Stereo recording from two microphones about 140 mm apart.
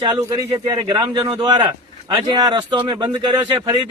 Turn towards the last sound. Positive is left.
turn(degrees=-30)  # may be behind; listen again after turning